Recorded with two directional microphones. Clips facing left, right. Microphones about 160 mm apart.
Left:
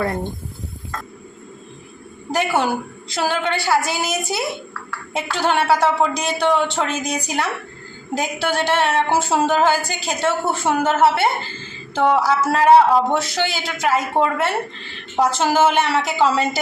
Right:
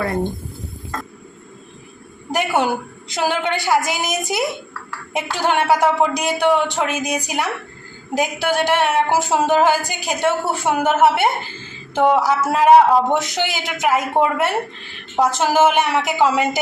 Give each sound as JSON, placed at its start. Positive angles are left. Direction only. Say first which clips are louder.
{"t": 2.3, "sound": "a woman's voice", "louder": "right 1 dB", "side_deg": -15}